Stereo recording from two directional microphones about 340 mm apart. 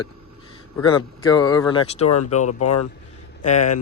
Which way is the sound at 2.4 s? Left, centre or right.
Left.